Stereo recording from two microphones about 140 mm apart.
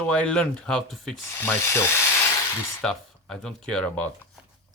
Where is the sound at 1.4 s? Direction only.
15° left (ahead or behind).